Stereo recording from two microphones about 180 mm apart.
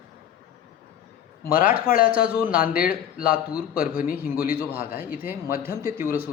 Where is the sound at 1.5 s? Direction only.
55° left (ahead or behind).